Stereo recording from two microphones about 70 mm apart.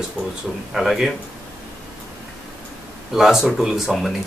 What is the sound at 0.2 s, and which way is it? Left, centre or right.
Speech, right.